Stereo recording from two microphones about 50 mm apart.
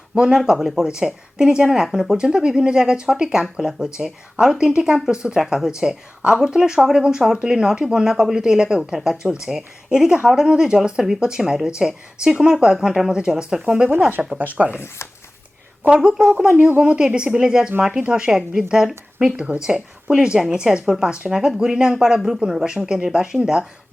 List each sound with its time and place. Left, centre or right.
0.1 s speech: centre
14.3 s speech: right
14.7 s speech: left
15.9 s speech: centre
16.6 s speech: right
17.0 s speech: centre